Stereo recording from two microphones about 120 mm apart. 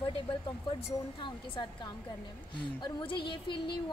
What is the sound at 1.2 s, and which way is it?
A woman's voice, 40° left (ahead or behind).